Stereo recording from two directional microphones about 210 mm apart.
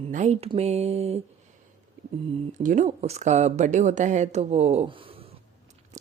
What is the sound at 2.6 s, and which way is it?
A woman's voice, 35° right (ahead or behind).